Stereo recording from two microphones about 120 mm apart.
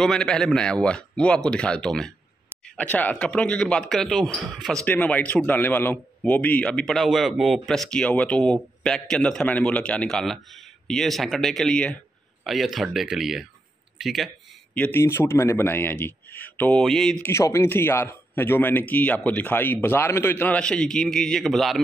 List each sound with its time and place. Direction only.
0.0 s a man's voice: 5° left (ahead or behind)
4.8 s a man's voice: 15° left (ahead or behind)
14.7 s a man's voice: 15° left (ahead or behind)
16.8 s a man's voice: 5° left (ahead or behind)
17.2 s a man's voice: 25° left (ahead or behind); by 21.8 s centre (ahead or behind)